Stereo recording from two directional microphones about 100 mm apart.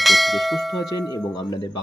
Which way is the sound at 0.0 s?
Centre (ahead or behind).